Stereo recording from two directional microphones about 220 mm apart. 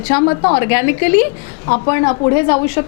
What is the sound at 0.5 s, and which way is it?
A woman's voice, 10° left (ahead or behind).